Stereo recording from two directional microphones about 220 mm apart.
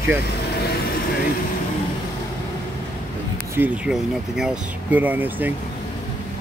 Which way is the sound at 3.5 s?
5° right (ahead or behind).